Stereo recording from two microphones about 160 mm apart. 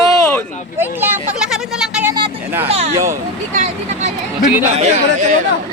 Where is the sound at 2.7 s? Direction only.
40° right (ahead or behind).